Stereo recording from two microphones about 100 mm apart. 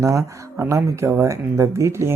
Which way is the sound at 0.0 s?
30° right (ahead or behind).